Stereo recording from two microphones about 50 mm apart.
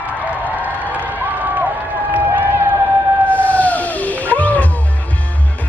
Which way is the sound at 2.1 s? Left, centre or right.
Right.